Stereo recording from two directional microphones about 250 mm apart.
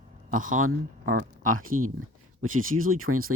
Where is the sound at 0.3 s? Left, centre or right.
Right.